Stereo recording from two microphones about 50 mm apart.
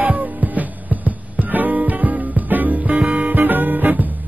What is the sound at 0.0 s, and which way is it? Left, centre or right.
Music, right.